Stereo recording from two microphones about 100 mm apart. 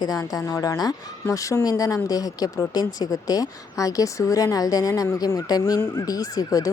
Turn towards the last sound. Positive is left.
turn(degrees=35)  # may be behind; listen again after turning